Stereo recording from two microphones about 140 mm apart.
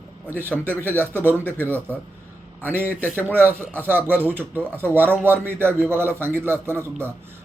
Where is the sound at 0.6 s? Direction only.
15° right (ahead or behind).